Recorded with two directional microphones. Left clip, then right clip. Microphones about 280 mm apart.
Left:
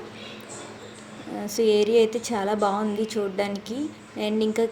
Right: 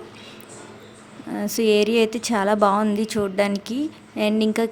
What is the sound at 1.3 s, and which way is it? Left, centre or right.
A woman's voice, right.